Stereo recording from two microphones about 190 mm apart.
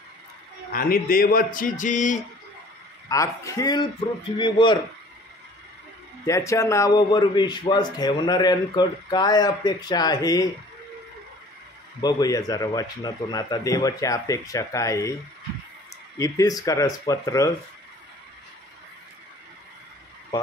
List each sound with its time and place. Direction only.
0.7 s a man's voice: 50° left (ahead or behind)
3.1 s a man's voice: 15° left (ahead or behind)
6.2 s a man's voice: 15° left (ahead or behind)
12.0 s a man's voice: 20° left (ahead or behind)
16.2 s speech: 20° left (ahead or behind)